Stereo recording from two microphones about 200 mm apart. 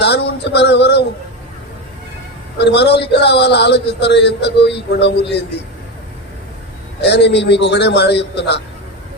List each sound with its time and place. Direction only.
0.0 s a man's voice: 55° left (ahead or behind)
2.6 s a man's voice: 55° left (ahead or behind)
7.0 s a man's voice: 60° left (ahead or behind)